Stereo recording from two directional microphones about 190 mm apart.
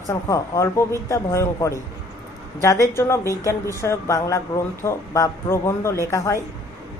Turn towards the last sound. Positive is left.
turn(degrees=15)  # may be behind; listen again after turning